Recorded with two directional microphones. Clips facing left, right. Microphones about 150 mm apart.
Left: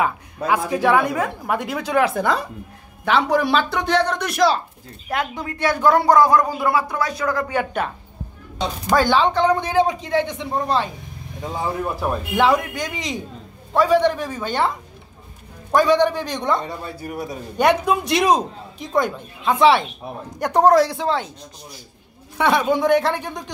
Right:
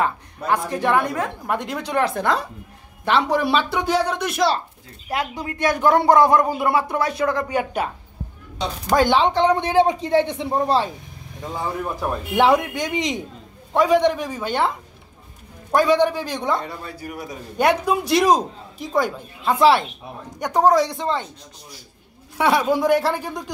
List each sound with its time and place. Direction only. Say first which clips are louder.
0.5 s a woman's voice: left 2 dB; 5° left (ahead or behind); by 7.6 s 20° right (ahead or behind)
8.9 s speech: even; 20° right (ahead or behind)
11.4 s a woman's voice: left 2 dB; 10° left (ahead or behind)
12.4 s speech: right 2 dB; 25° right (ahead or behind)
15.7 s speech: left 1 dB; 5° right (ahead or behind)
16.5 s speech: left 2 dB; 25° left (ahead or behind)
17.6 s a man's voice: left 1 dB; 5° right (ahead or behind)
20.3 s a woman's voice: left 2 dB; 10° left (ahead or behind)
22.4 s a man's voice: even; 5° right (ahead or behind)